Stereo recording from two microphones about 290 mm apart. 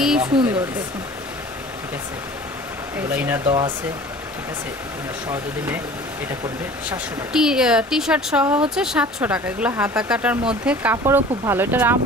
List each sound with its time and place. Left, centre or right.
0.0 s speech: centre
3.4 s speech: centre
6.9 s speech: centre